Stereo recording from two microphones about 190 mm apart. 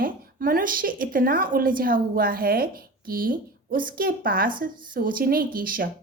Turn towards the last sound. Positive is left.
turn(degrees=-50)  # may be behind; listen again after turning